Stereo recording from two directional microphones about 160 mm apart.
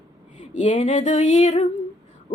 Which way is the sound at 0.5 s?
50° left (ahead or behind).